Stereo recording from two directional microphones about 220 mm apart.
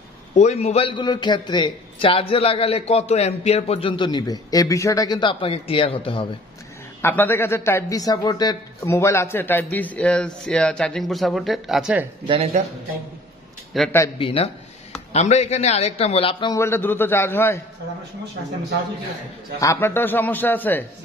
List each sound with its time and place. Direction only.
0.3 s a man's voice: 30° left (ahead or behind)
7.0 s a man's voice: 10° left (ahead or behind)
12.3 s speech: 25° right (ahead or behind)
13.9 s a man's voice: 15° left (ahead or behind)
14.2 s a man's voice: 25° left (ahead or behind)
19.6 s a man's voice: 10° left (ahead or behind)